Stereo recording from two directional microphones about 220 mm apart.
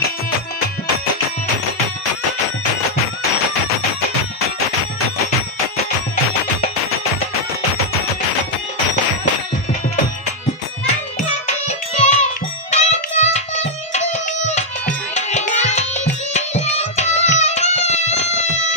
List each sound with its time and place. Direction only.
11.1 s music: 30° left (ahead or behind)
15.1 s music: 30° left (ahead or behind)